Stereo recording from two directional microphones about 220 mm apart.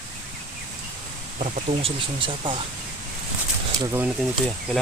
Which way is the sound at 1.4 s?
30° right (ahead or behind).